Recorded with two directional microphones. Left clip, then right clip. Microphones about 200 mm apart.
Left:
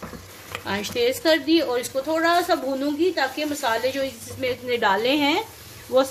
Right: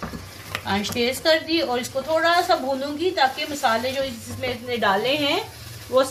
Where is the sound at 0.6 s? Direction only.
55° left (ahead or behind).